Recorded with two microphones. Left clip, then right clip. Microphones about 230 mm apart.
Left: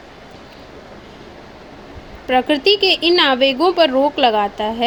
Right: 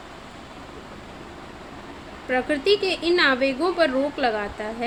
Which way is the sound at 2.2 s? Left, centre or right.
Left.